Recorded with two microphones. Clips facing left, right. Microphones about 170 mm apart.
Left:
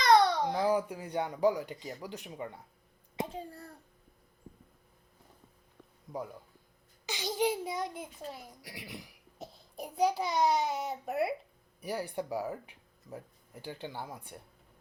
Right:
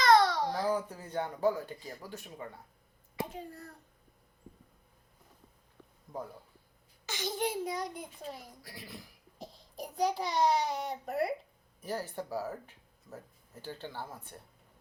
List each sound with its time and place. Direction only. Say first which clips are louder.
0.0 s a child's voice: even; 15° left (ahead or behind)
3.2 s a child's voice: left 1 dB; 30° left (ahead or behind)
7.0 s a child's voice: left 3 dB; 15° left (ahead or behind)
8.6 s speech: left 2 dB; 15° left (ahead or behind)
9.4 s a child's voice: even; 5° left (ahead or behind)